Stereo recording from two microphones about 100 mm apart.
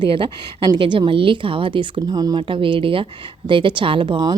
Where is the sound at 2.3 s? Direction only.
60° right (ahead or behind).